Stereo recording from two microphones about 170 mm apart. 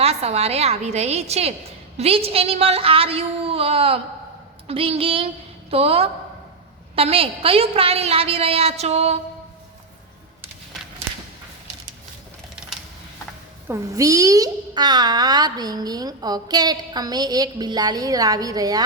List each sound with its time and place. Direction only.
0.0 s a woman's voice: 35° right (ahead or behind)
13.7 s a child's voice: 20° right (ahead or behind)